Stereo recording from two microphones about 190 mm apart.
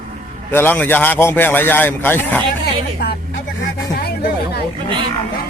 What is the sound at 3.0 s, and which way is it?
Speech, 55° left (ahead or behind).